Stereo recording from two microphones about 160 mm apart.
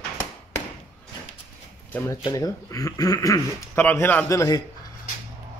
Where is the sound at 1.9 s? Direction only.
10° left (ahead or behind).